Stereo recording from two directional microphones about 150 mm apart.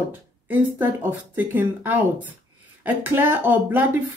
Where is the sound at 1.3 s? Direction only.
10° right (ahead or behind).